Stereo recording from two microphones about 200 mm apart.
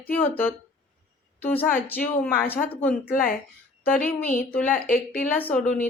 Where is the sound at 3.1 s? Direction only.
45° left (ahead or behind).